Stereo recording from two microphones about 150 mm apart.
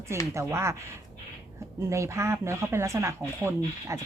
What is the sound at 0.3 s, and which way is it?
Speech, 20° right (ahead or behind).